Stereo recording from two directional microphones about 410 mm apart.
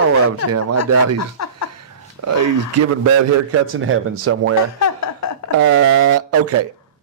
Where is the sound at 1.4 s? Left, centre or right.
Left.